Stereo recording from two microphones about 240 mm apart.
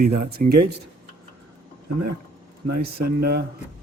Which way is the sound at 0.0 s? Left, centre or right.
Right.